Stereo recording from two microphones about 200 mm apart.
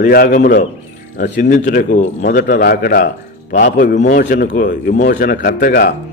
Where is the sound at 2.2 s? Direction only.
55° left (ahead or behind).